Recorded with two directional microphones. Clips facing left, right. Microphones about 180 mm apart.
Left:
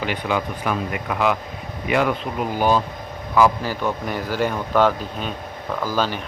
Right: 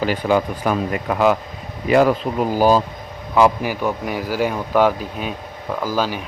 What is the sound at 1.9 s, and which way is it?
Speech, 35° right (ahead or behind).